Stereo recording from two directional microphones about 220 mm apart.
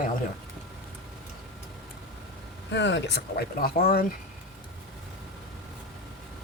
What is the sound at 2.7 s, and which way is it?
Speech, 50° left (ahead or behind).